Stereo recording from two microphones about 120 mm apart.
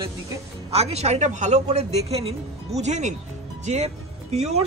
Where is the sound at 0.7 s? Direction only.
65° right (ahead or behind).